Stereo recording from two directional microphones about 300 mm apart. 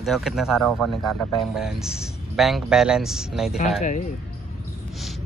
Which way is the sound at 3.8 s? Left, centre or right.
Left.